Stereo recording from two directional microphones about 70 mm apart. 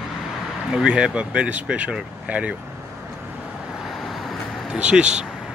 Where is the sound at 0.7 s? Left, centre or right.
Centre.